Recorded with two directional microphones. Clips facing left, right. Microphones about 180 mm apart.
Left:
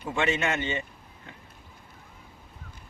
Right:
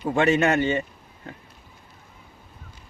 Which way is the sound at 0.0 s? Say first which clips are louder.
Right 7 dB; 40° right (ahead or behind).